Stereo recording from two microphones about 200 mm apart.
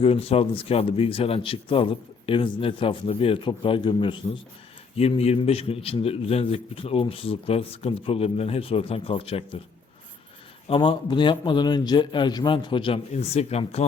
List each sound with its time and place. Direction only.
0.0 s a man's voice: 30° left (ahead or behind)
10.7 s a man's voice: 25° left (ahead or behind)